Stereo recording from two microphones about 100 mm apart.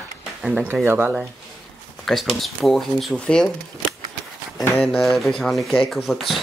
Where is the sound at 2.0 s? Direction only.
Centre (ahead or behind).